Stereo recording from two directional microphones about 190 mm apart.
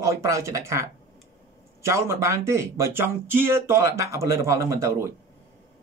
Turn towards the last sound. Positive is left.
turn(degrees=-15)  # may be behind; listen again after turning